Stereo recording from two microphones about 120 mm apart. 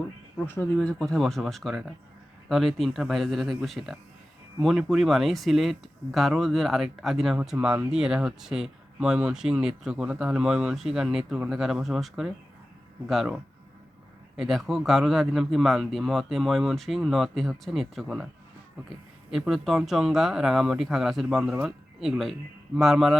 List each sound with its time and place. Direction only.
0.3 s speech: 20° left (ahead or behind)
0.8 s speech: 5° left (ahead or behind)
19.3 s speech: centre (ahead or behind)